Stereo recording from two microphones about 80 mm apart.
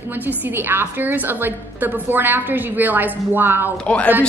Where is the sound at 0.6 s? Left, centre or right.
Right.